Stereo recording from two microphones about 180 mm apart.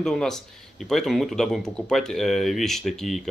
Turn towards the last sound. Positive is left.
turn(degrees=0)  # may be behind; listen again after turning